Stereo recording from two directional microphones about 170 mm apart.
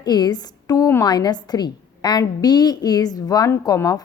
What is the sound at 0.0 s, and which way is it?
A woman's voice, 25° left (ahead or behind).